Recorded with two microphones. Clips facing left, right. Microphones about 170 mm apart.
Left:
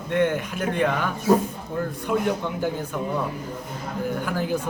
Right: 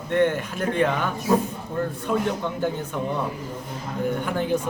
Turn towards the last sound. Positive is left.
turn(degrees=5)  # may be behind; listen again after turning